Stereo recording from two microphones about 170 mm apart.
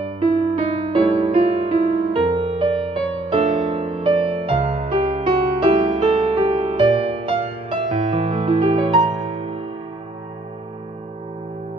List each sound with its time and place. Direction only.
0.6 s music: 35° right (ahead or behind)